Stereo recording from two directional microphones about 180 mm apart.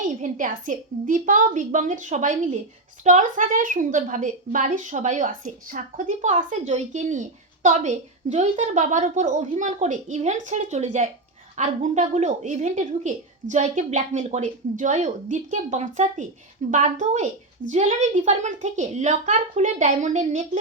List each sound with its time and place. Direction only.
0.2 s a woman's voice: 45° right (ahead or behind)